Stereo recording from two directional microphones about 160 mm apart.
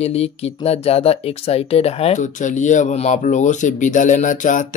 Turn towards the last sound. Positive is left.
turn(degrees=55)  # may be behind; listen again after turning